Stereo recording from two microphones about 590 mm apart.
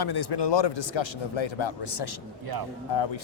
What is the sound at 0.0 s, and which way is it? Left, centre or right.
Speech, left.